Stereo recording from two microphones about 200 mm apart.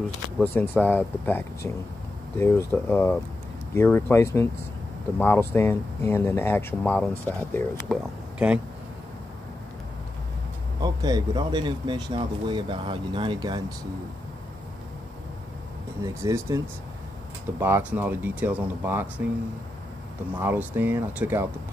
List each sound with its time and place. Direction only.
0.4 s speech: 10° left (ahead or behind)
10.8 s speech: 20° right (ahead or behind)
16.0 s speech: 15° right (ahead or behind)
20.3 s speech: 10° right (ahead or behind)